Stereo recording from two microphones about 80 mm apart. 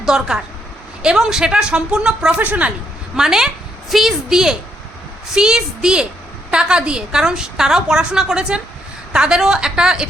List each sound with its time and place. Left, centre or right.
0.0 s a woman's voice: centre
3.2 s a woman's voice: centre